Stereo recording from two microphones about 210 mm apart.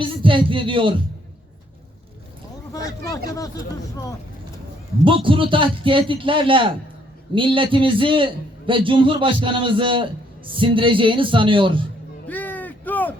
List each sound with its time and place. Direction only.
0.0 s a man's voice: 25° right (ahead or behind)
2.7 s speech: 15° left (ahead or behind)
5.0 s a man's voice: 25° right (ahead or behind)
12.3 s a sound: 10° left (ahead or behind)